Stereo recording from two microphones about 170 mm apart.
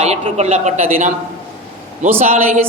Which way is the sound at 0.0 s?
40° right (ahead or behind).